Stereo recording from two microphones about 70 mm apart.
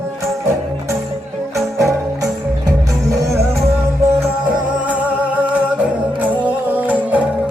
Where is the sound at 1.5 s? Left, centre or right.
Right.